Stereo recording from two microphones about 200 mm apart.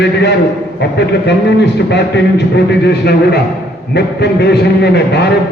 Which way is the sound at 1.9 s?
60° left (ahead or behind).